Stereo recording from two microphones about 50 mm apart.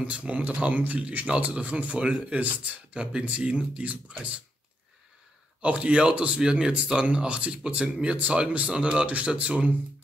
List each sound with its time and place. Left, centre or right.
0.0 s speech: right
1.2 s speech: right
5.6 s speech: right